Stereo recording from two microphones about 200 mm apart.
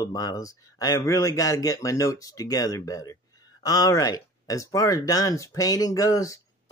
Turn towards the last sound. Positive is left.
turn(degrees=15)  # may be behind; listen again after turning